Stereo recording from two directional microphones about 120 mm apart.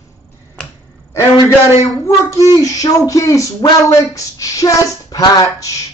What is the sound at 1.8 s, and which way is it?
Speech, 25° left (ahead or behind).